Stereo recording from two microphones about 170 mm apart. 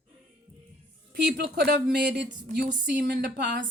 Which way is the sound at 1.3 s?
70° right (ahead or behind).